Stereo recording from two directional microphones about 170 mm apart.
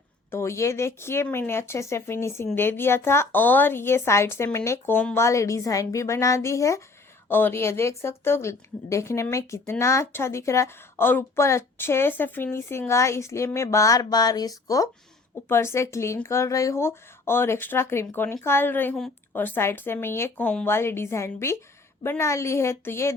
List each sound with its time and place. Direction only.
0.3 s a woman's voice: 15° left (ahead or behind)